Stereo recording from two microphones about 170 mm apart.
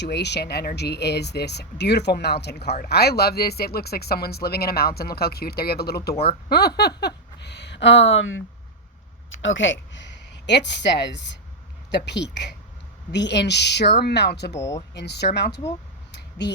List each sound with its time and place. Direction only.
0.0 s speech: 85° left
2.7 s speech: 65° left (ahead or behind)